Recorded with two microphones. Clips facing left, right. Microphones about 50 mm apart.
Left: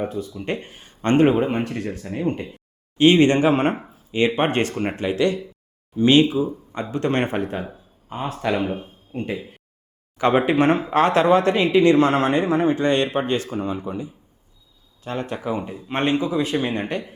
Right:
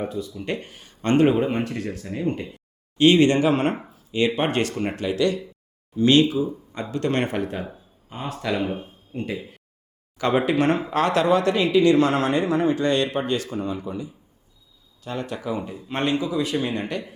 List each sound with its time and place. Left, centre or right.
0.0 s speech: left
8.5 s speech: left